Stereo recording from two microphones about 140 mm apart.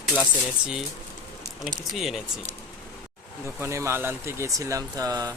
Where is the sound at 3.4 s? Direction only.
20° right (ahead or behind).